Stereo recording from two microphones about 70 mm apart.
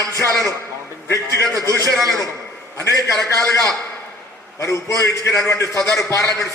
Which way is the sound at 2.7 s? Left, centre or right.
Left.